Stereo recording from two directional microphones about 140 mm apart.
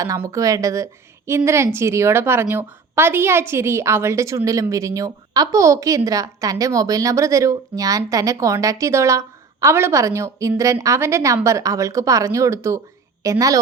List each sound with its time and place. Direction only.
0.0 s a woman's voice: 25° right (ahead or behind)